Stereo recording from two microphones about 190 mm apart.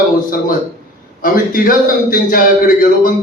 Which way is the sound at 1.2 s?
45° left (ahead or behind).